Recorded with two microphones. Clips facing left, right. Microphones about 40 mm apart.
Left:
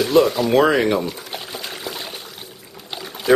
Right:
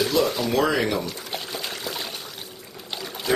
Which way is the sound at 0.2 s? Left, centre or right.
Left.